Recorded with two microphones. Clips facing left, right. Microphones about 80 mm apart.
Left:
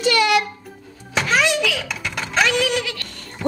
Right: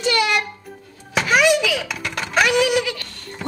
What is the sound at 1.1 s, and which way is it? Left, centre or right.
Thunk, centre.